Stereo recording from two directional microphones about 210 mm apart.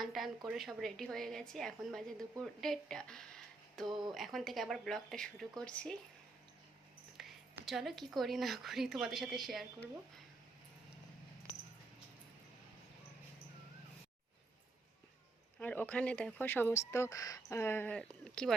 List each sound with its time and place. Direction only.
0.0 s speech: centre (ahead or behind)
7.2 s speech: centre (ahead or behind)
15.6 s speech: 10° left (ahead or behind)